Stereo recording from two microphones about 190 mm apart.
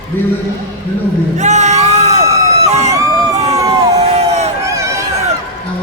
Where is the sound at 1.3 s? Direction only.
40° right (ahead or behind).